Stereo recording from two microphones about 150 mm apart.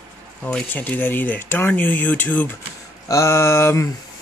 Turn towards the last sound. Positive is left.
turn(degrees=20)  # may be behind; listen again after turning